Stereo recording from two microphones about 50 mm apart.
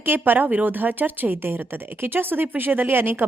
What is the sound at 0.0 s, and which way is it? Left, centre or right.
A woman's voice, right.